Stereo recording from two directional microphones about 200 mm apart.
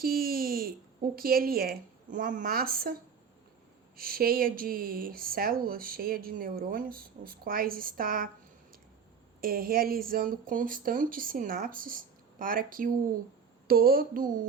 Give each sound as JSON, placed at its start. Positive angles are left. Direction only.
{"t": 0.0, "sound": "a sound", "side_deg": -50}
{"t": 1.1, "sound": "speech", "side_deg": -45}
{"t": 3.9, "sound": "speech", "side_deg": -45}
{"t": 9.4, "sound": "speech", "side_deg": -45}